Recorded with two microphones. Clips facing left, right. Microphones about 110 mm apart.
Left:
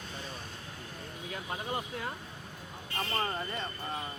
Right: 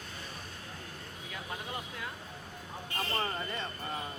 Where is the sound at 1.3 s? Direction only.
35° left (ahead or behind).